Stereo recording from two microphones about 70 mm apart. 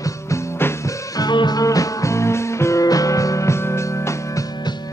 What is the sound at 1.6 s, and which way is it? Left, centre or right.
Music, left.